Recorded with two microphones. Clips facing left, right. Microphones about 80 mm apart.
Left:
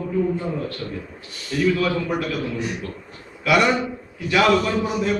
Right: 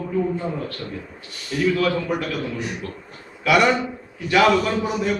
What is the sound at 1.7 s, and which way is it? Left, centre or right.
Speech, centre.